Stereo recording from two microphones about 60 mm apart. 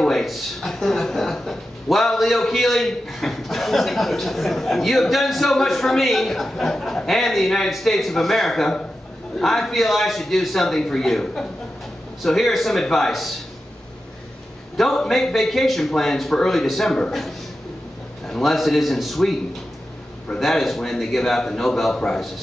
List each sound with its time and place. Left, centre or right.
0.0 s speech: centre
14.8 s speech: centre
20.3 s speech: centre